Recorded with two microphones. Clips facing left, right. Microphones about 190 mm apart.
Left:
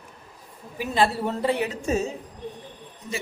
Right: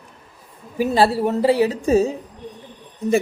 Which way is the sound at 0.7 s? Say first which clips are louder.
Right 6 dB; 40° right (ahead or behind).